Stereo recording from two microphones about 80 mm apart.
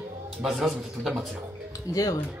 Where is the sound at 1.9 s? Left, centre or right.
Left.